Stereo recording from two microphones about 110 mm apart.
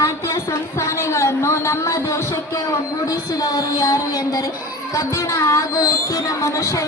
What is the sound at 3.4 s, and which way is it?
Speech, 30° left (ahead or behind).